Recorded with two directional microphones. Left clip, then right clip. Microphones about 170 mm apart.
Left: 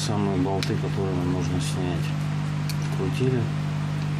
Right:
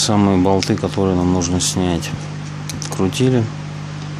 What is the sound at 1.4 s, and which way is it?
Speech, 60° right (ahead or behind).